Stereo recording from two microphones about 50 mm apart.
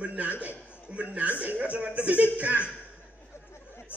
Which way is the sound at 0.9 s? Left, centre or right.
Right.